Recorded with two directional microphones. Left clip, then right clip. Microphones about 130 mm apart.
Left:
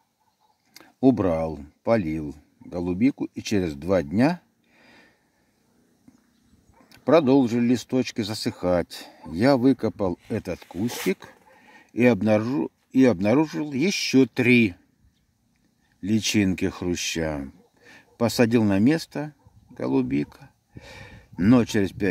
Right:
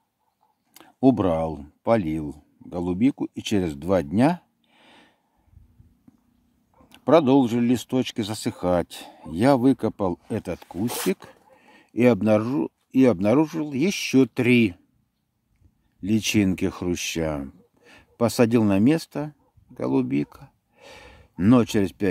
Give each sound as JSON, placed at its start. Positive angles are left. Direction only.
{"t": 0.7, "sound": "speech", "side_deg": -20}
{"t": 6.9, "sound": "speech", "side_deg": -20}
{"t": 16.0, "sound": "speech", "side_deg": -20}